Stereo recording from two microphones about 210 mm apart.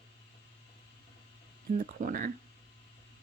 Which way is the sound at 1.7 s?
40° right (ahead or behind).